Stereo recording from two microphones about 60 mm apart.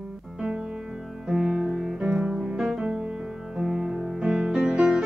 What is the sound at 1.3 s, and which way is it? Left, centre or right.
Music, centre.